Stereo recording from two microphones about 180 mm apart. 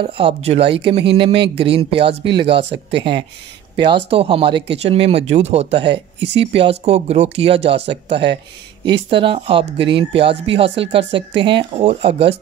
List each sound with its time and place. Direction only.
0.0 s speech: 30° right (ahead or behind)